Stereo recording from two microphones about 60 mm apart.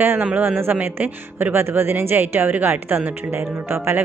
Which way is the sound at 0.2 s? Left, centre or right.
Right.